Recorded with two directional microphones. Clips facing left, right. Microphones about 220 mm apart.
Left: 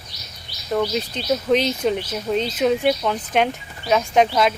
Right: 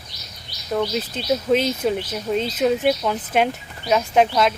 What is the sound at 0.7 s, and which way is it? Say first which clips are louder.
Speech: left 1 dB; centre (ahead or behind).